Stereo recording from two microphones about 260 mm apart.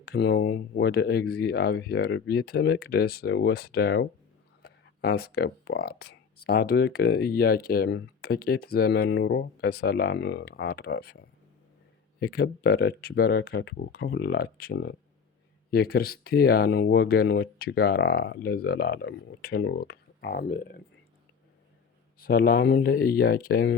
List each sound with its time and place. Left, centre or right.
0.0 s speech: left
22.2 s speech: left